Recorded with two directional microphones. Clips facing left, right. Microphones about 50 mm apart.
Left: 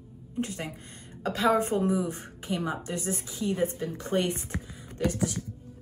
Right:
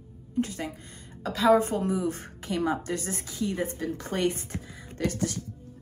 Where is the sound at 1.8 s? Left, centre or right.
Centre.